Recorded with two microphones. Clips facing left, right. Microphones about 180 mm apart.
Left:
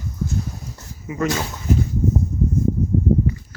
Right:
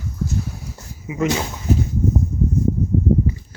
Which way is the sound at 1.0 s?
15° right (ahead or behind).